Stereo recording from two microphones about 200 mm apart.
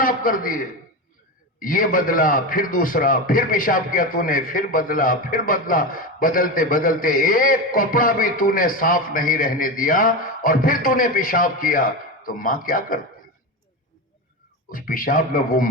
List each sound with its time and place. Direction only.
0.0 s a man's voice: 45° left (ahead or behind)
14.7 s a man's voice: 45° left (ahead or behind)